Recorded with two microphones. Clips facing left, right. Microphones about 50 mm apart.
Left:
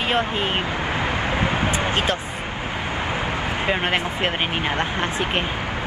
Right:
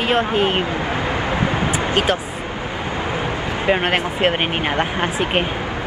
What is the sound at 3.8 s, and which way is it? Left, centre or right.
Speech, right.